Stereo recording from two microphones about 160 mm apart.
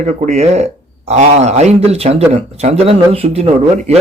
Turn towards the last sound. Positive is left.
turn(degrees=-40)  # may be behind; listen again after turning